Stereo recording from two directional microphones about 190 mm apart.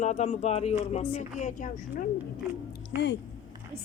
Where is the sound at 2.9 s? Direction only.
65° left (ahead or behind).